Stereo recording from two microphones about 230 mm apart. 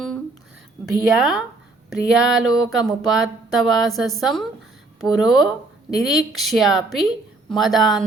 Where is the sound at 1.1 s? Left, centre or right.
Centre.